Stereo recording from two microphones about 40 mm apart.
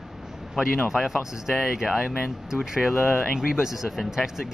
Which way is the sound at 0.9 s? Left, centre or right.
Centre.